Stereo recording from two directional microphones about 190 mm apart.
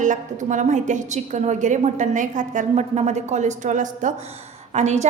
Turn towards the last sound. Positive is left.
turn(degrees=-35)  # may be behind; listen again after turning